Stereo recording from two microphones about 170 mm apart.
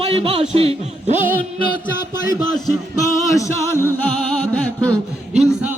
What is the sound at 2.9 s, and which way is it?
Music, 20° left (ahead or behind).